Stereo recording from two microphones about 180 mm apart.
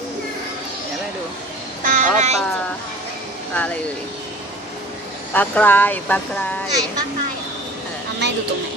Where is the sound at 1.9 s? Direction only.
45° right (ahead or behind).